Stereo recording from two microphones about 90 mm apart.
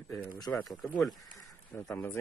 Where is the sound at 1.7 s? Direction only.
20° left (ahead or behind).